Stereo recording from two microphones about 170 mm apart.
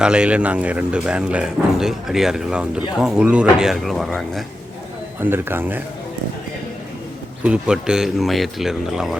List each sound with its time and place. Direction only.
0.0 s a man's voice: 5° right (ahead or behind)
5.2 s a man's voice: 10° right (ahead or behind)
7.4 s speech: 5° right (ahead or behind)